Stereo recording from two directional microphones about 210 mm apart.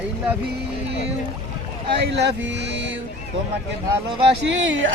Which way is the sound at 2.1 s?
55° right (ahead or behind).